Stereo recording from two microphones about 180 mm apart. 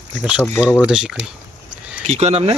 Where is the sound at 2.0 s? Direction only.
35° right (ahead or behind).